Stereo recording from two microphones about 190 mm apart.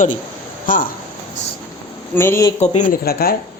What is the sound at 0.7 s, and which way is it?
Speech, 45° left (ahead or behind).